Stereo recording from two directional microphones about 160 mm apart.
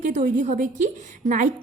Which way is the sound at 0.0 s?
50° right (ahead or behind).